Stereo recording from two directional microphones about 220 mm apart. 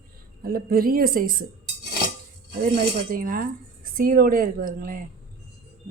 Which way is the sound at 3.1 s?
40° right (ahead or behind).